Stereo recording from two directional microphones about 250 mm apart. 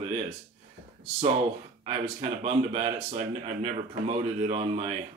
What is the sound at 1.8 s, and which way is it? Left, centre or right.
Speech, right.